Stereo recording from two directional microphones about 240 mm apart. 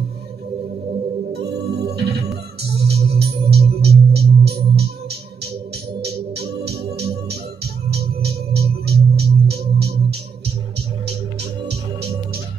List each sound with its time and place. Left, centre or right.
1.3 s music: right
5.9 s music: right